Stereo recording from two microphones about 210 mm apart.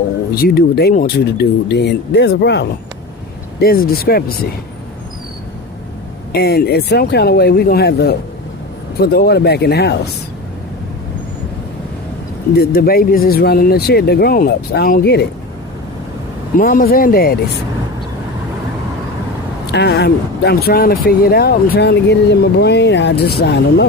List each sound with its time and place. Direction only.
0.3 s speech: 45° left (ahead or behind)
6.3 s speech: 50° left (ahead or behind)
12.5 s speech: 45° left (ahead or behind)
16.6 s speech: 45° left (ahead or behind)
19.6 s speech: 55° left (ahead or behind)